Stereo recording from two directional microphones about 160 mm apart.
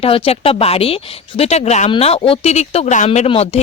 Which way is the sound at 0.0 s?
40° left (ahead or behind).